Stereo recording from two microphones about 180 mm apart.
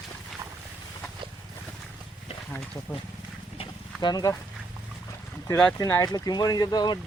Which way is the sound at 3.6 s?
25° left (ahead or behind).